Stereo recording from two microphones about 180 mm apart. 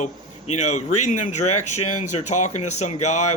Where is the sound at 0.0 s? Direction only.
40° left (ahead or behind).